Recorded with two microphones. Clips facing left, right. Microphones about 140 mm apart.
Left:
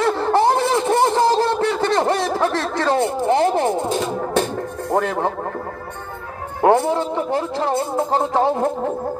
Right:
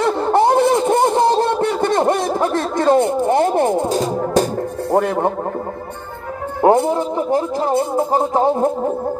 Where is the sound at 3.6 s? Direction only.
20° right (ahead or behind).